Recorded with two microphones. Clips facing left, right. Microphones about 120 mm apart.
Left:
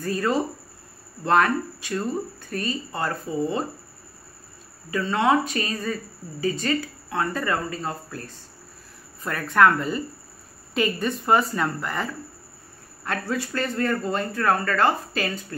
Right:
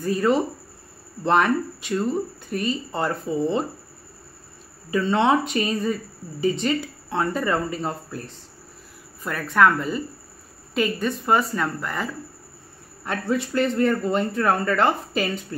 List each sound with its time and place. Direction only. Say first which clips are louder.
0.0 s speech: right 3 dB; 15° right (ahead or behind)
4.9 s speech: right 2 dB; 25° right (ahead or behind)
9.2 s speech: even; centre (ahead or behind)
13.0 s speech: right 3 dB; 15° right (ahead or behind)